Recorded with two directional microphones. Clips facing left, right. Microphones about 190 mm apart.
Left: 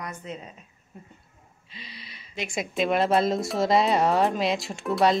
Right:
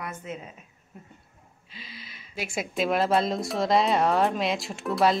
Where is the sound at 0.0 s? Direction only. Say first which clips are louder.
Even; 5° right (ahead or behind).